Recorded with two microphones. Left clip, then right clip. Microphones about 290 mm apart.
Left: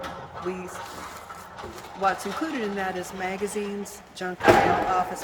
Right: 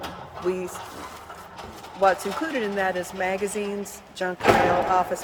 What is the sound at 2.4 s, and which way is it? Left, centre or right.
Speech, centre.